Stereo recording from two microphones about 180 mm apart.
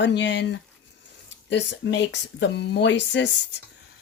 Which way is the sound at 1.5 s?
85° left.